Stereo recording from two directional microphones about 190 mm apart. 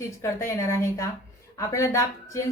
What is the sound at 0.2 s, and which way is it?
A woman's voice, 15° left (ahead or behind).